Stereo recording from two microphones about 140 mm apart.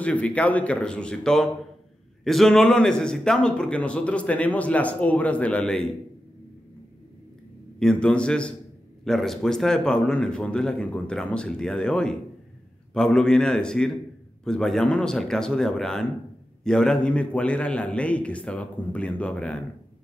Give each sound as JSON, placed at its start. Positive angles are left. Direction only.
{"t": 0.0, "sound": "a man's voice", "side_deg": 10}
{"t": 7.8, "sound": "a man's voice", "side_deg": 5}